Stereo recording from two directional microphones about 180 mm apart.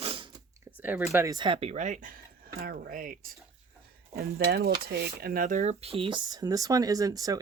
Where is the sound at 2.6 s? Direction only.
55° right (ahead or behind).